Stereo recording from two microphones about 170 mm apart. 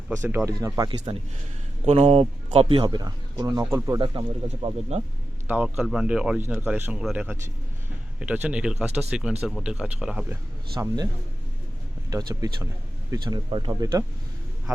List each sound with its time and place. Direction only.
0.2 s speech: 15° right (ahead or behind)
4.0 s speech: 30° right (ahead or behind)
5.5 s speech: 10° right (ahead or behind)
10.8 s speech: 25° right (ahead or behind)
12.1 s speech: 20° right (ahead or behind)